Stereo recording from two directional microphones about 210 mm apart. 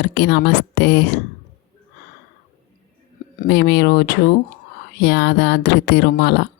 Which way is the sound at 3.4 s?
50° left (ahead or behind).